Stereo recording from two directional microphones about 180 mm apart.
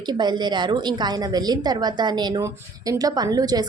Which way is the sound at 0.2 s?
25° right (ahead or behind).